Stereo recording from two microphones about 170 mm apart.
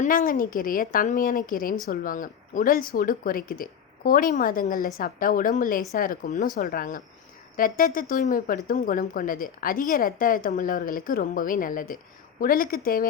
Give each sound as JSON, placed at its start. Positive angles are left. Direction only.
{"t": 0.0, "sound": "a woman's voice", "side_deg": 50}